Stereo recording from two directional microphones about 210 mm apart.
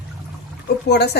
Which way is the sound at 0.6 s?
50° left (ahead or behind).